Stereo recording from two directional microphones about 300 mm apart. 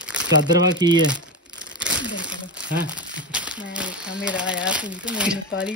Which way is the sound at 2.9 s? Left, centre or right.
Centre.